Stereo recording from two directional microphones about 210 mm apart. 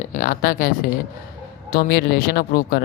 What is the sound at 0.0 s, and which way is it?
Speech, 40° left (ahead or behind).